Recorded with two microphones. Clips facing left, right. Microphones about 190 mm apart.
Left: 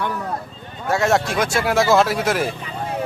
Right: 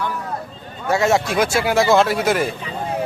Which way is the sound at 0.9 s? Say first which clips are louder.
Right 1 dB; centre (ahead or behind).